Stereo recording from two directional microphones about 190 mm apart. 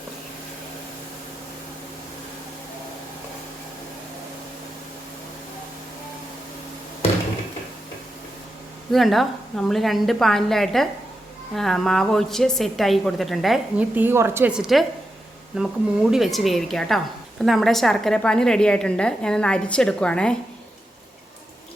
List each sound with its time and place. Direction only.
8.9 s a woman's voice: centre (ahead or behind)